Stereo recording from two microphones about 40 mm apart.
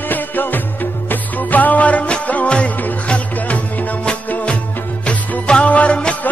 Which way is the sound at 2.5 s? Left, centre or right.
Left.